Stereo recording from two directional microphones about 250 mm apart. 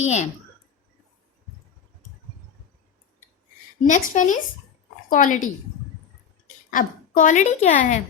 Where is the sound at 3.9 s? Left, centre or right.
Left.